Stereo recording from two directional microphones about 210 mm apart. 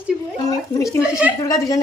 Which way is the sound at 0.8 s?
5° right (ahead or behind).